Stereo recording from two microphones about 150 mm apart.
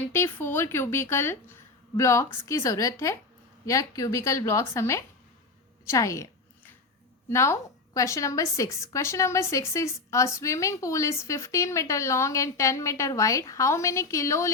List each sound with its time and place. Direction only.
0.0 s a woman's voice: 15° left (ahead or behind)
7.3 s a woman's voice: 20° left (ahead or behind)